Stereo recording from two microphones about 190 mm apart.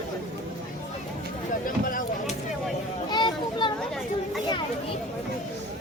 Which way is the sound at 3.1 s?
25° left (ahead or behind).